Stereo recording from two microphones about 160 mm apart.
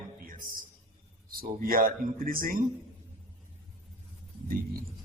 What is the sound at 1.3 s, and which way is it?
Speech, 65° right (ahead or behind).